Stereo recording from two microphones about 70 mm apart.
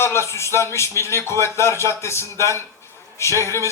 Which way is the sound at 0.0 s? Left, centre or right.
Left.